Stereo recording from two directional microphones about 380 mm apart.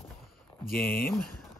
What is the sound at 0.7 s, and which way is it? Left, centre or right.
Speech, left.